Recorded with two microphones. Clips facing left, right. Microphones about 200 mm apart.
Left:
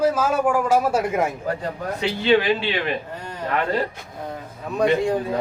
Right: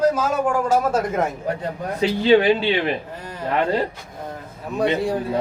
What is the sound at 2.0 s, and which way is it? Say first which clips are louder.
Speech: right 4 dB; 35° right (ahead or behind).